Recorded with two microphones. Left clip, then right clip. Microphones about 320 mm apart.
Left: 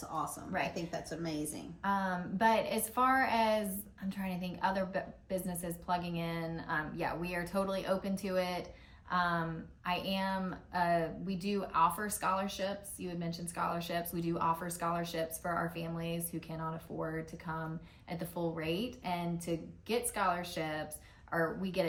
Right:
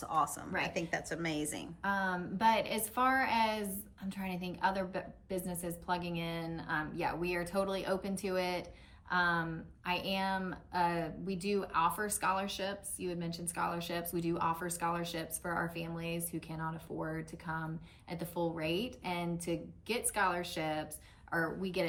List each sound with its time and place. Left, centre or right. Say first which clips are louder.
0.7 s a woman's voice: right 3 dB; centre
1.8 s speech: even; centre